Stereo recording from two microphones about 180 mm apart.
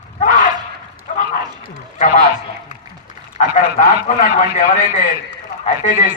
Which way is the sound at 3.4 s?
40° left (ahead or behind).